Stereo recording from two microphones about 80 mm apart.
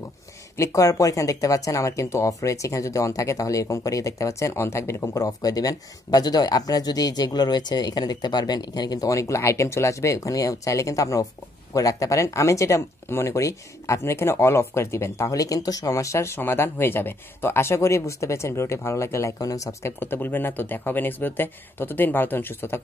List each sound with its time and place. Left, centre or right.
0.6 s speech: left
20.0 s speech: left